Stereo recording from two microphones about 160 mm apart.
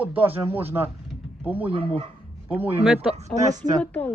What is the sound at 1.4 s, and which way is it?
Speech, 10° right (ahead or behind).